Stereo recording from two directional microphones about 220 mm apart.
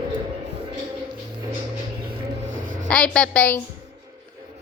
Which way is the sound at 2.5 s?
35° right (ahead or behind).